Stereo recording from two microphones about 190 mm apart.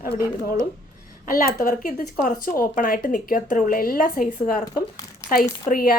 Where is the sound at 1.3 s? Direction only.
50° left (ahead or behind).